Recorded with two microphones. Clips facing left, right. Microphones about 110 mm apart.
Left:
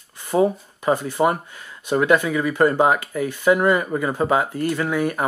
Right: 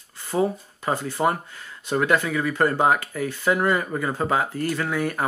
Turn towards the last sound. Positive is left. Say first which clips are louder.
# left 3 dB
turn(degrees=20)  # may be behind; listen again after turning